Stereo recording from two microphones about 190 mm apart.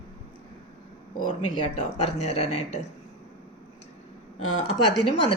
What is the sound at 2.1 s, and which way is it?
Speech, 35° left (ahead or behind).